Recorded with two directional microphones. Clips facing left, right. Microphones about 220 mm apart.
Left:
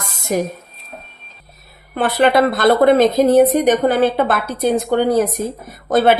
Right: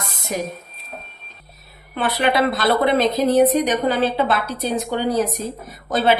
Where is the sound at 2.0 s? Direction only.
50° left (ahead or behind).